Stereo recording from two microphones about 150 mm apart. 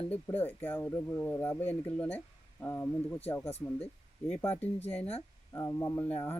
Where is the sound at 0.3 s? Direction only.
15° left (ahead or behind).